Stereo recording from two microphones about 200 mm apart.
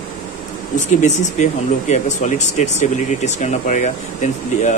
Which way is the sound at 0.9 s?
35° left (ahead or behind).